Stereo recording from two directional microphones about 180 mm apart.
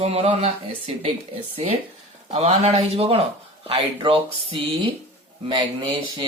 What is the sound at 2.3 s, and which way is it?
Speech, 35° right (ahead or behind).